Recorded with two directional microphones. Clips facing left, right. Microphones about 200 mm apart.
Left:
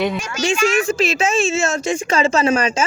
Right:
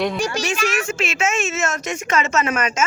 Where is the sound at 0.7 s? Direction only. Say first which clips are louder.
Left 6 dB; 35° left (ahead or behind).